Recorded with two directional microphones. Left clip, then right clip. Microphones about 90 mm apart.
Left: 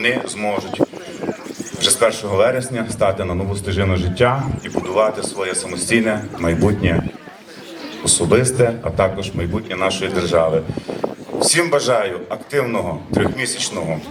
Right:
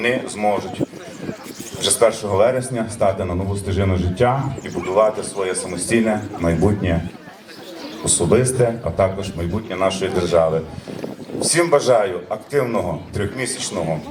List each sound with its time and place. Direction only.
0.0 s a man's voice: 30° left (ahead or behind)
1.8 s a man's voice: 25° left (ahead or behind)
4.9 s a man's voice: 35° left (ahead or behind)
8.0 s a man's voice: 30° left (ahead or behind)